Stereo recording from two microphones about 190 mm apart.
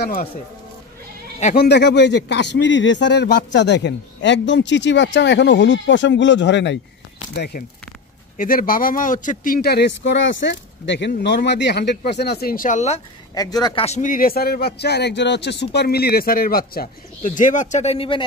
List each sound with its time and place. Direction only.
0.0 s speech: 50° left (ahead or behind)
1.4 s speech: 50° left (ahead or behind); by 6.8 s 65° left (ahead or behind)
7.3 s speech: 55° left (ahead or behind); by 13.0 s 35° left (ahead or behind)
13.3 s speech: 20° left (ahead or behind)
13.8 s speech: 40° left (ahead or behind)